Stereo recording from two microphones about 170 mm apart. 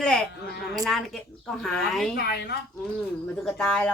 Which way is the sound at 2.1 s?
70° left (ahead or behind).